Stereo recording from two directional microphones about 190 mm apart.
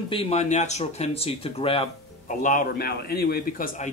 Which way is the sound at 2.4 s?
45° left (ahead or behind).